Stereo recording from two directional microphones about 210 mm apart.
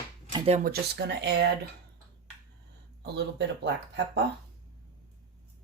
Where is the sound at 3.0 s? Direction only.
55° right (ahead or behind).